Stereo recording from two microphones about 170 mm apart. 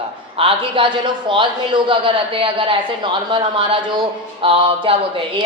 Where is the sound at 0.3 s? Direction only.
30° right (ahead or behind).